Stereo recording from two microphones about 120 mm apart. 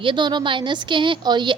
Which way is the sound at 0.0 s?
40° right (ahead or behind).